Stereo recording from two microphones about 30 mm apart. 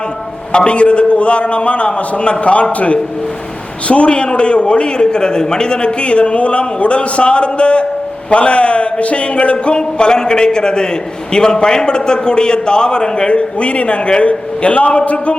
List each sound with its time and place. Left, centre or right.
0.5 s a man's voice: left
9.7 s a man's voice: left